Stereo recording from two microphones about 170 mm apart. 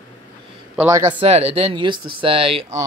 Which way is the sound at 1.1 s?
35° right (ahead or behind).